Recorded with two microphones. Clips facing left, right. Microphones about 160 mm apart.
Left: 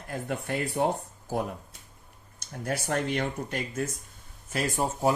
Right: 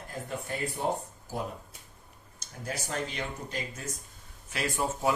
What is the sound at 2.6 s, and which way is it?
Speech, 60° left (ahead or behind).